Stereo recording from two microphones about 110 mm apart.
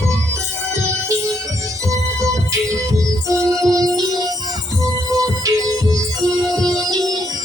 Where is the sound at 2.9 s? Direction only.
30° right (ahead or behind).